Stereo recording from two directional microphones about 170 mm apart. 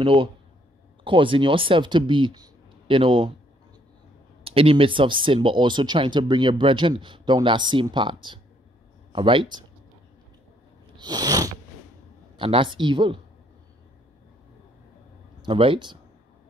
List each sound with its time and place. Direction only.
0.0 s speech: 30° right (ahead or behind)
4.5 s speech: 35° right (ahead or behind)
11.0 s a sound: 25° right (ahead or behind)
12.4 s speech: 30° right (ahead or behind)
15.4 s speech: 30° right (ahead or behind)